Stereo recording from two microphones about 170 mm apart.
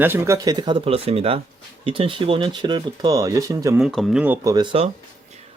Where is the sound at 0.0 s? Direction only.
15° right (ahead or behind).